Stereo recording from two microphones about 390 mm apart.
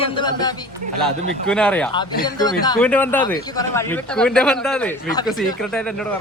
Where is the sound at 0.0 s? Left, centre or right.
Centre.